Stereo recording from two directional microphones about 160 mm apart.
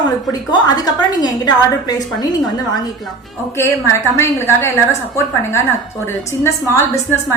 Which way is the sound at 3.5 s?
15° left (ahead or behind).